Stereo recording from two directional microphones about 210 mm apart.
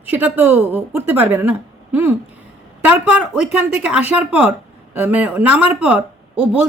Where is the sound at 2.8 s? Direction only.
5° right (ahead or behind).